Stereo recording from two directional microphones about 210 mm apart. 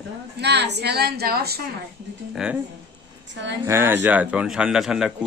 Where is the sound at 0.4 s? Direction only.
55° right (ahead or behind).